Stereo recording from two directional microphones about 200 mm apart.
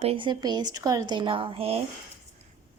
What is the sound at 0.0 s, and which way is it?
Speech, 25° right (ahead or behind).